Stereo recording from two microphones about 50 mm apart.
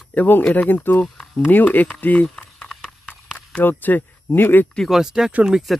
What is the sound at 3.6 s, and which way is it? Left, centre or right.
Speech, left.